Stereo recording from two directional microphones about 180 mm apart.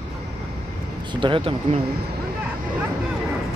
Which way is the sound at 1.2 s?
30° right (ahead or behind).